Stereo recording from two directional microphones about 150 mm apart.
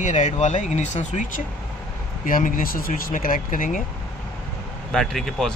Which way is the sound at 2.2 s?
65° left (ahead or behind).